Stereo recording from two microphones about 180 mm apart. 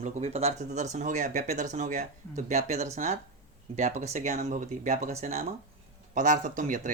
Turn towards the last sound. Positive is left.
turn(degrees=-45)  # may be behind; listen again after turning